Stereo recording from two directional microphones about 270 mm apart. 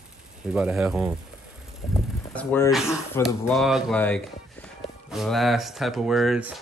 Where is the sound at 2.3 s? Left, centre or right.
Centre.